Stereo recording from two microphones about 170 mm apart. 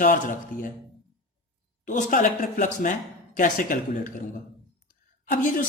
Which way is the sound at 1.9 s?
50° left (ahead or behind).